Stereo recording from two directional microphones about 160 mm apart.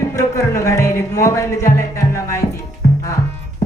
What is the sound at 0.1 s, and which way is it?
Music, 20° left (ahead or behind).